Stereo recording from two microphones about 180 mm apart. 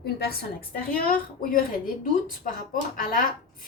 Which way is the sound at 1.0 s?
55° left (ahead or behind).